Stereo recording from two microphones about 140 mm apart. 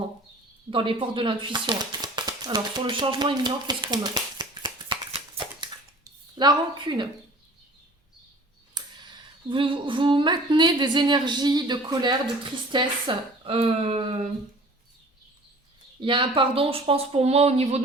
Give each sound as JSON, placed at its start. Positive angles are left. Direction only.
{"t": 0.7, "sound": "speech", "side_deg": -40}
{"t": 6.3, "sound": "a woman's voice", "side_deg": -35}
{"t": 8.8, "sound": "tick", "side_deg": -30}
{"t": 9.5, "sound": "a woman's voice", "side_deg": -35}
{"t": 16.0, "sound": "speech", "side_deg": -35}